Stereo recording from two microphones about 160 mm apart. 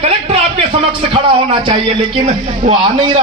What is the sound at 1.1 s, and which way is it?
A man's voice, 35° right (ahead or behind).